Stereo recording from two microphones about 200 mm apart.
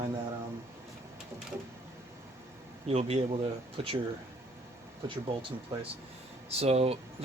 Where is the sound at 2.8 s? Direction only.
30° right (ahead or behind).